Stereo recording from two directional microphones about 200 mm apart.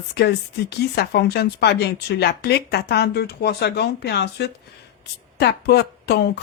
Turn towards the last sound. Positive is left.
turn(degrees=55)  # may be behind; listen again after turning